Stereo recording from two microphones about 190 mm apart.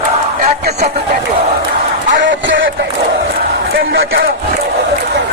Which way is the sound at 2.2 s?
80° right.